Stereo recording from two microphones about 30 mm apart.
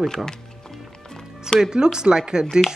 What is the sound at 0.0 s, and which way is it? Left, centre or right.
Speech, centre.